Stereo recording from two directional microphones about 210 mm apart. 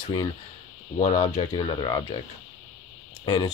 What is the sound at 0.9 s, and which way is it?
Speech, 35° left (ahead or behind).